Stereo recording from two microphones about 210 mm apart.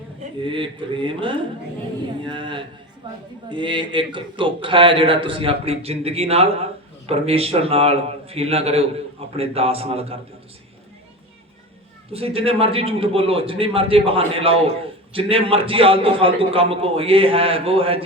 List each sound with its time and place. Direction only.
0.4 s a man's voice: 25° right (ahead or behind)
12.1 s a man's voice: 25° right (ahead or behind)